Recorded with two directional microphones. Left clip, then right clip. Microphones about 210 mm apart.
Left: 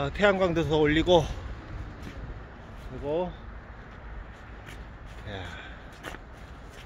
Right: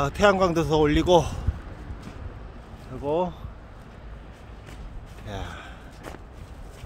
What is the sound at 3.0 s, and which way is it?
Speech, 20° right (ahead or behind).